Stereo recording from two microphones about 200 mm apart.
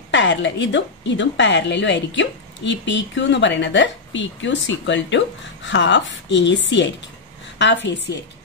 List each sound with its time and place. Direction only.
0.1 s a woman's voice: 65° left (ahead or behind)